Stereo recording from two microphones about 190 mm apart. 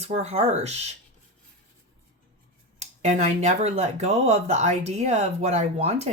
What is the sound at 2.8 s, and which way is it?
Speech, 35° right (ahead or behind).